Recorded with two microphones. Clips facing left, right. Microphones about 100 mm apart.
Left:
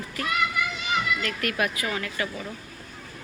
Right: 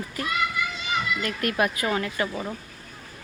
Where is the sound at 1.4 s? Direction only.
30° right (ahead or behind).